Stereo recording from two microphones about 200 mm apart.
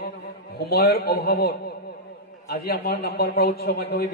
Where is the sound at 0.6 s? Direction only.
50° left (ahead or behind).